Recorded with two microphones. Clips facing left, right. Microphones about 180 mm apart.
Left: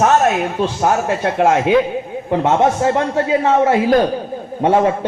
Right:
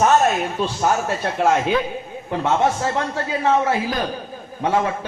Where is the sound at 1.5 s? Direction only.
20° left (ahead or behind).